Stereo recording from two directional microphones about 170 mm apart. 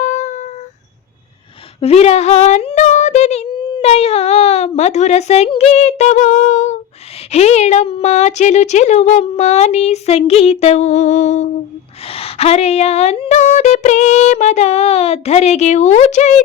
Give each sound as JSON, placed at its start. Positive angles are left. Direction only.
{"t": 0.0, "sound": "a sound", "side_deg": 45}
{"t": 1.8, "sound": "speech", "side_deg": 40}
{"t": 12.0, "sound": "speech", "side_deg": 35}